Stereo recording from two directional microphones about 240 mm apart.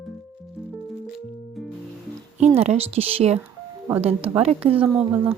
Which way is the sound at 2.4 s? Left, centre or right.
Right.